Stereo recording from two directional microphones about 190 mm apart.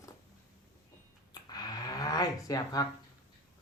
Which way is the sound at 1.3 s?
20° left (ahead or behind).